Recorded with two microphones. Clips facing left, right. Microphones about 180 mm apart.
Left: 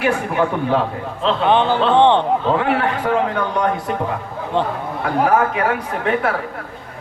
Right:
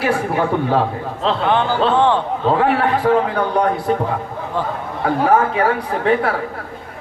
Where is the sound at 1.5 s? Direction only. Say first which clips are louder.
Left 2 dB; 20° left (ahead or behind).